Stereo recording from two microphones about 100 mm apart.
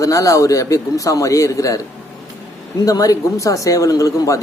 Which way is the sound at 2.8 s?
35° left (ahead or behind).